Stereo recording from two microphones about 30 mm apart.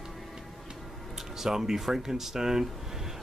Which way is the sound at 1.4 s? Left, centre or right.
Centre.